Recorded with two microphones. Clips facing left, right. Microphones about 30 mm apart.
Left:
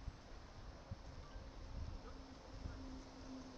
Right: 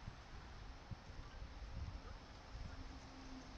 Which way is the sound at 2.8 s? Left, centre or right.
Centre.